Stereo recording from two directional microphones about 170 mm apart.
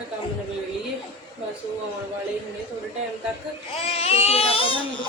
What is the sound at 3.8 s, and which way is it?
Speech, 35° left (ahead or behind).